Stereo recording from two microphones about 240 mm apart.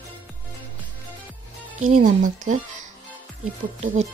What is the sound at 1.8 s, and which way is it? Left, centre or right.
Speech, right.